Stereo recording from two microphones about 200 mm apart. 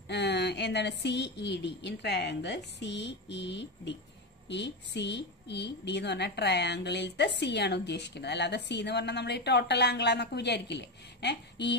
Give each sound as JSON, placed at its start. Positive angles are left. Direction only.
{"t": 0.1, "sound": "a woman's voice", "side_deg": 55}